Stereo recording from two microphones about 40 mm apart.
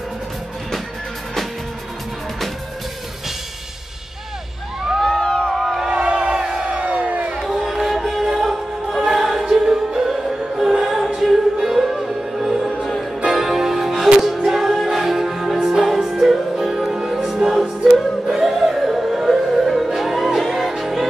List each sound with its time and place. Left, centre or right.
5.0 s a sound: left
5.5 s crowd: centre
6.0 s crowd: right
7.3 s music: centre
18.2 s music: centre